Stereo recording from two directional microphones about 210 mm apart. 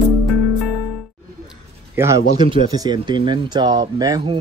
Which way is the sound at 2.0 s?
15° right (ahead or behind).